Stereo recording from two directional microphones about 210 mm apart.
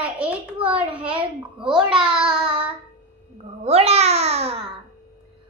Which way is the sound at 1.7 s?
5° right (ahead or behind).